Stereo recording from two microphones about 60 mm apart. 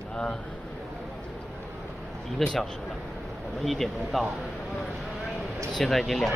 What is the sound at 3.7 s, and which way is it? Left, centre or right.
Speech, centre.